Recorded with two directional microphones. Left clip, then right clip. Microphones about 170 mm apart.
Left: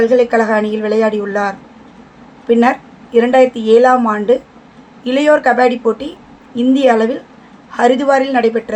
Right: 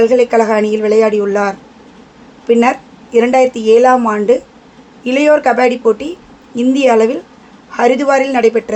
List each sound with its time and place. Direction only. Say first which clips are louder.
0.0 s speech: right 2 dB; 25° right (ahead or behind)